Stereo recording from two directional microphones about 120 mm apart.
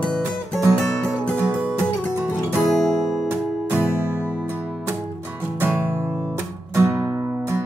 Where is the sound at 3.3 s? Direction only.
15° right (ahead or behind).